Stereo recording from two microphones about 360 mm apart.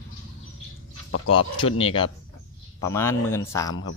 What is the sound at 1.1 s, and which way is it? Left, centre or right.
Speech, left.